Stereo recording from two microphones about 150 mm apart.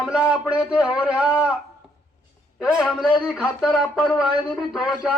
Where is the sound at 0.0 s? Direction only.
5° right (ahead or behind).